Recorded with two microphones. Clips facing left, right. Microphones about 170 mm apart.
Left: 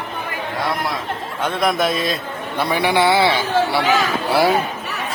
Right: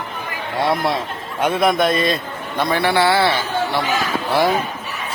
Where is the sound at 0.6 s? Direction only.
25° right (ahead or behind).